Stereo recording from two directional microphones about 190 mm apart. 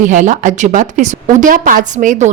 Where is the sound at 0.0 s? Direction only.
40° right (ahead or behind).